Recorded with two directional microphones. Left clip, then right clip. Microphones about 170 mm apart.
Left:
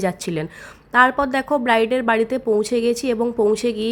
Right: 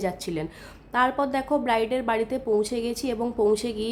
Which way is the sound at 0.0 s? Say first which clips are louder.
Left 5 dB; 20° left (ahead or behind).